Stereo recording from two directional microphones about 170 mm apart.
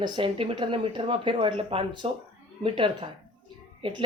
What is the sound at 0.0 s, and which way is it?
A woman's voice, 30° right (ahead or behind).